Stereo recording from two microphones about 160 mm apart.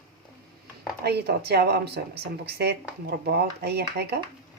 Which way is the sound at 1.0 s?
90° right.